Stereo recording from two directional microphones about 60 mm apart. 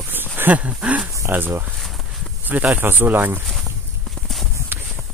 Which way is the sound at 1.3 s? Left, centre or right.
Right.